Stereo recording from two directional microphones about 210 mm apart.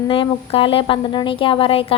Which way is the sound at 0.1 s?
25° left (ahead or behind).